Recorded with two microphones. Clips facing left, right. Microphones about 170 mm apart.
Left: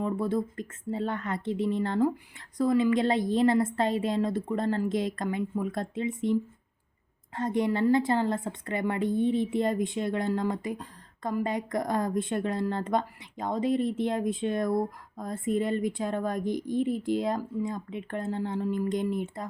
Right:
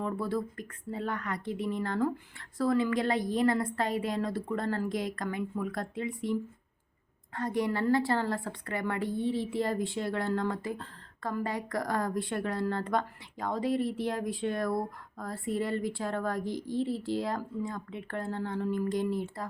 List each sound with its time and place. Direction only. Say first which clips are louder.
0.0 s a woman's voice: left 4 dB; 20° left (ahead or behind)
7.3 s a woman's voice: left 3 dB; 20° left (ahead or behind)